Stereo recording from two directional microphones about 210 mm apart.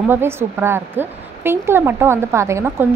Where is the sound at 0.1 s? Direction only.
10° right (ahead or behind).